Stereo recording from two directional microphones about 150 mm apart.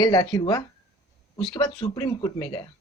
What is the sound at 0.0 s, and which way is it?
Speech, 30° left (ahead or behind).